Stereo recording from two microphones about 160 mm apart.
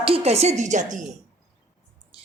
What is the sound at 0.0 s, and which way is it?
A woman's voice, 40° right (ahead or behind).